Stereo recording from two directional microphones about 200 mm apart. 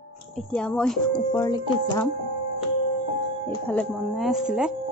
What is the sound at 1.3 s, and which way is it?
Speech, 15° left (ahead or behind).